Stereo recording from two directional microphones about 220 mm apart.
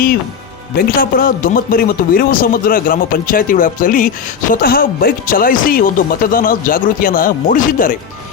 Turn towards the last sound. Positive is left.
turn(degrees=40)  # may be behind; listen again after turning